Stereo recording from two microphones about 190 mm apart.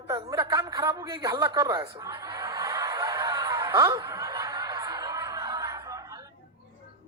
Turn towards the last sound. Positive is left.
turn(degrees=-20)  # may be behind; listen again after turning